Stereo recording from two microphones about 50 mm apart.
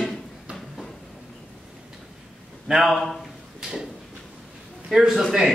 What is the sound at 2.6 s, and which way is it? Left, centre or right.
Speech, centre.